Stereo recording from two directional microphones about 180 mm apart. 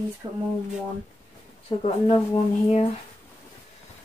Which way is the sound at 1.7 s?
25° left (ahead or behind).